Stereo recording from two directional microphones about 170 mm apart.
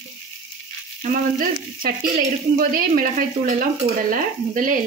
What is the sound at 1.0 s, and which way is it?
Speech, 55° right (ahead or behind).